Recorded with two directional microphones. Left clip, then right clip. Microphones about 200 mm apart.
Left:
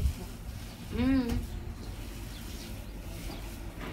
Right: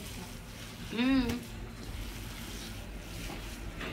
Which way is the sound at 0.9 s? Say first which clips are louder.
Even; 10° right (ahead or behind).